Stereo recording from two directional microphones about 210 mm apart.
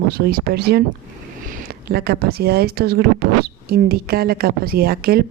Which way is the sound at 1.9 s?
50° right (ahead or behind).